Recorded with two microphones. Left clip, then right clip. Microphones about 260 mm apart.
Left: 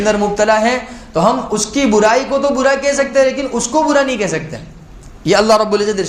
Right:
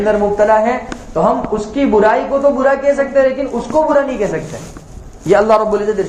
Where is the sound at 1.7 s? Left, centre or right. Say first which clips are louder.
Even; left.